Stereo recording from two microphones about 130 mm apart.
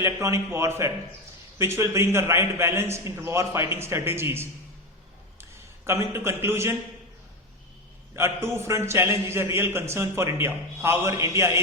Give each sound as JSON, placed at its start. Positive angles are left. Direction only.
{"t": 0.0, "sound": "a man's voice", "side_deg": -25}
{"t": 8.1, "sound": "a man's voice", "side_deg": -20}